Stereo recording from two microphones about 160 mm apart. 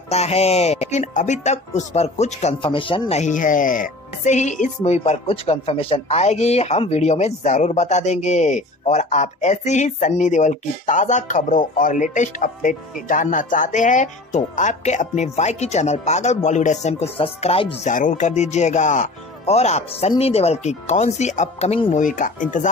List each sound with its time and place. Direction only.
0.1 s speech: 40° left (ahead or behind)
2.6 s speech: 35° left (ahead or behind)
17.8 s speech: 55° left (ahead or behind)
21.9 s speech: 55° left (ahead or behind)